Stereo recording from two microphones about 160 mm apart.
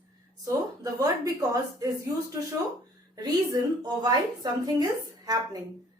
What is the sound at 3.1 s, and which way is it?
A woman's voice, 25° right (ahead or behind).